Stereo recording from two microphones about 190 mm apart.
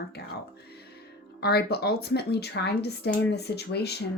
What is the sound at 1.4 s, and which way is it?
Speech, 55° left (ahead or behind).